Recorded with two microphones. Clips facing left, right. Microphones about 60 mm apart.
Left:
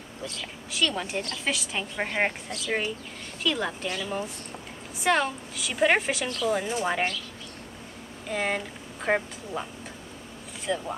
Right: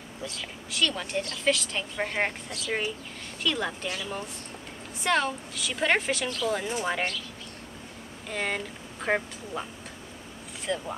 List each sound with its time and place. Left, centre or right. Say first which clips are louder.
0.2 s a woman's voice: left 1 dB; centre
5.0 s a woman's voice: left 2 dB; centre
8.3 s a woman's voice: left 2 dB; centre
10.7 s a woman's voice: left 2 dB; centre